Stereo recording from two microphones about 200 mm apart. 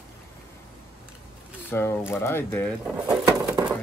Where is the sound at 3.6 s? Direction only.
20° right (ahead or behind).